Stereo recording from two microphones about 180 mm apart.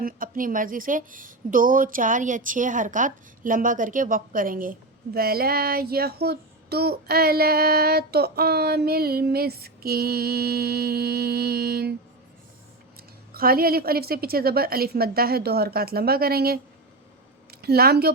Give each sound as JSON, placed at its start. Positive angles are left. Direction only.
{"t": 0.0, "sound": "speech", "side_deg": -50}
{"t": 13.0, "sound": "a woman's voice", "side_deg": -55}